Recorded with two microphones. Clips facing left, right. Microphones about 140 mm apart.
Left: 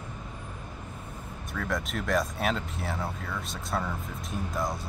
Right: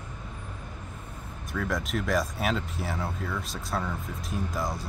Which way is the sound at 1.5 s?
Centre (ahead or behind).